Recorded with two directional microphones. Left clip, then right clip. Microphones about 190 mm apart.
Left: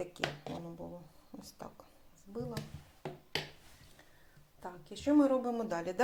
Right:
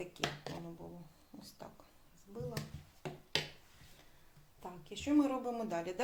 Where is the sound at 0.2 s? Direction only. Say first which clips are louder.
Left 1 dB; 40° left (ahead or behind).